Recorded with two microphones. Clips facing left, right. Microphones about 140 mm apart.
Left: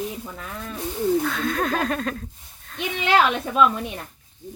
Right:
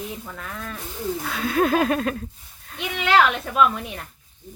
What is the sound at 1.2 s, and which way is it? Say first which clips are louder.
Speech: right 2 dB; 5° right (ahead or behind).